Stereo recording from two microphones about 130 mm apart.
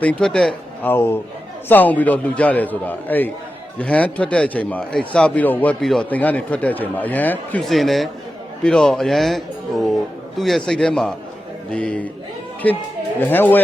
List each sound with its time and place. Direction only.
0.0 s speech: 10° left (ahead or behind)
0.8 s speech: 15° left (ahead or behind)
7.6 s speech: centre (ahead or behind)
13.1 s speech: 15° left (ahead or behind)